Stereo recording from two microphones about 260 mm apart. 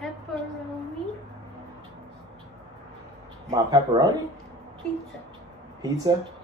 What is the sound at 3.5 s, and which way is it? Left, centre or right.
Speech, centre.